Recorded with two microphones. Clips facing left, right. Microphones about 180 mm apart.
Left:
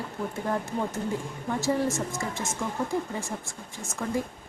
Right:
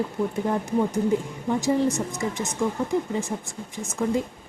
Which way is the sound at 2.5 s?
20° right (ahead or behind).